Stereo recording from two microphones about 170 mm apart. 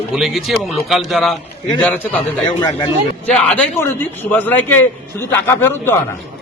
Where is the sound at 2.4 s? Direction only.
25° left (ahead or behind).